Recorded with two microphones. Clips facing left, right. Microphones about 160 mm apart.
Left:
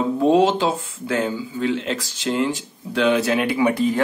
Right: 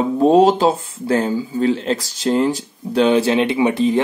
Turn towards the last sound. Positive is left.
turn(degrees=-20)  # may be behind; listen again after turning